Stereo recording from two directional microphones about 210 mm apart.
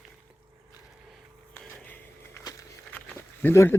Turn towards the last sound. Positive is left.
turn(degrees=10)  # may be behind; listen again after turning